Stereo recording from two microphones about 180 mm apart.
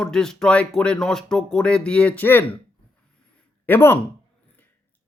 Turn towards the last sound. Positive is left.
turn(degrees=10)  # may be behind; listen again after turning